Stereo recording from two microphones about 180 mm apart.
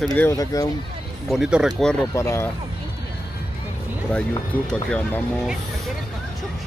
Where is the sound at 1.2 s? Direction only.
Centre (ahead or behind).